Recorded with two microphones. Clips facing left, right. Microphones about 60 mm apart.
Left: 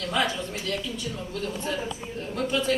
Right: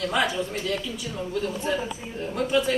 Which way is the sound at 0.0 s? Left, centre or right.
Centre.